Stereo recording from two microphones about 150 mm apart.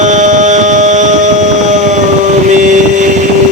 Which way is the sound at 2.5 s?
55° right (ahead or behind).